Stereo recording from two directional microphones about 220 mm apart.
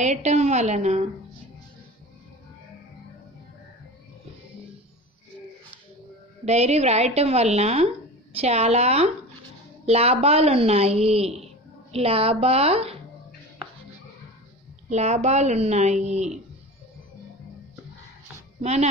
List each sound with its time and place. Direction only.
0.0 s a woman's voice: 30° right (ahead or behind)
6.4 s a woman's voice: 30° right (ahead or behind)
14.9 s a woman's voice: 30° right (ahead or behind)
18.6 s speech: 30° right (ahead or behind)